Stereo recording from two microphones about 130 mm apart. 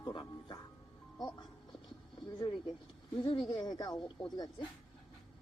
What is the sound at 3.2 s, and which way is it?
Speech, 35° left (ahead or behind).